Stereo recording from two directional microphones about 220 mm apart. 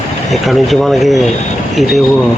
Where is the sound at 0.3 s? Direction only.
Centre (ahead or behind).